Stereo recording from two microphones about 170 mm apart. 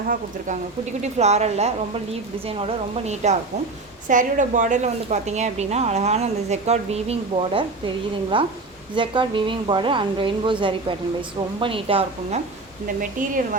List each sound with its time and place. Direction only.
0.1 s a woman's voice: 45° right (ahead or behind)
4.1 s a woman's voice: 50° right (ahead or behind); by 12.4 s 35° right (ahead or behind)
13.0 s a woman's voice: 50° right (ahead or behind)